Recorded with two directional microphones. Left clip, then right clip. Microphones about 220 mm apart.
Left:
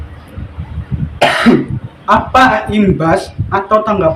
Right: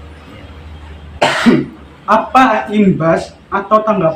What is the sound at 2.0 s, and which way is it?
Speech, 45° left (ahead or behind).